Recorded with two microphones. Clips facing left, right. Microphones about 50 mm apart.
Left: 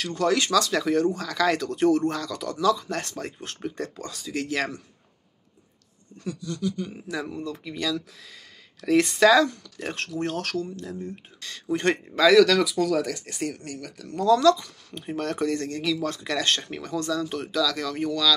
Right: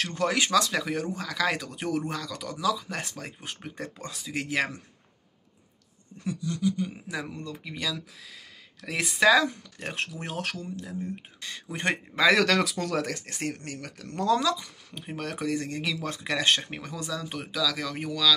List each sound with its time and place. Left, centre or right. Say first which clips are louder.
0.0 s speech: left 3 dB; right
0.7 s speech: left 6 dB; centre
6.1 s speech: right 1 dB; right
12.4 s speech: left 6 dB; right
14.4 s speech: left 9 dB; centre